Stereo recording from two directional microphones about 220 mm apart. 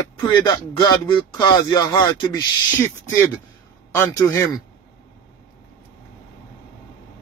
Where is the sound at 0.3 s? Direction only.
20° left (ahead or behind).